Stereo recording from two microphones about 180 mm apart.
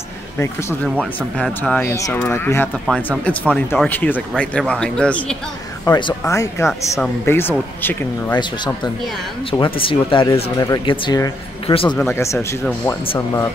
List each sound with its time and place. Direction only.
0.4 s a man's voice: 15° left (ahead or behind)
5.9 s speech: 25° left (ahead or behind)
8.4 s speech: 25° left (ahead or behind)
12.2 s speech: 15° left (ahead or behind)